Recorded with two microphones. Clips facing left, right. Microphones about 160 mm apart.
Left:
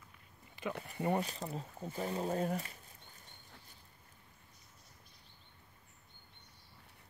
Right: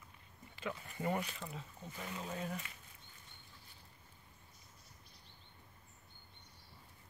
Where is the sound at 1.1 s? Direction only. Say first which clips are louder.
Left 4 dB; 35° left (ahead or behind).